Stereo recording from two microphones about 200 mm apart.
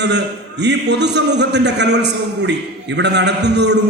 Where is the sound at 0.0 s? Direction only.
60° right (ahead or behind).